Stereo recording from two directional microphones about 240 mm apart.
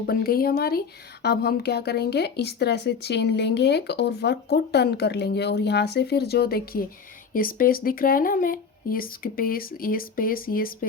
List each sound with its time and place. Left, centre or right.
0.0 s speech: left